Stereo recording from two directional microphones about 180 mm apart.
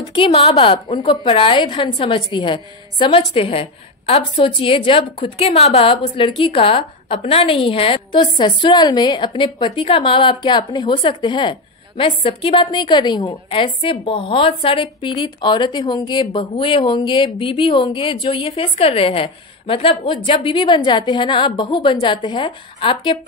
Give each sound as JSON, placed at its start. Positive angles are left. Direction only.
{"t": 0.1, "sound": "a woman's voice", "side_deg": 30}